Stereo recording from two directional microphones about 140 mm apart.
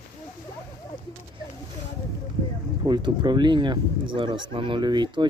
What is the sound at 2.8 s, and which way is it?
Speech, 30° right (ahead or behind).